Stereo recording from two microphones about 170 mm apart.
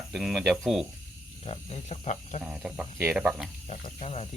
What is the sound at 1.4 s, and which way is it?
Speech, 35° left (ahead or behind).